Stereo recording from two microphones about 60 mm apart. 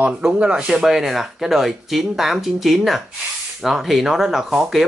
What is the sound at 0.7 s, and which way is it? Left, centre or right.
Speech, centre.